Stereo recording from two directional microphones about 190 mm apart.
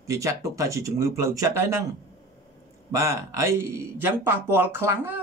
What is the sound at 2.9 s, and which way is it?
Speech, 15° right (ahead or behind).